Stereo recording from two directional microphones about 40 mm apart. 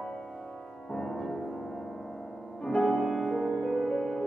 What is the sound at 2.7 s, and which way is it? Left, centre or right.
Music, left.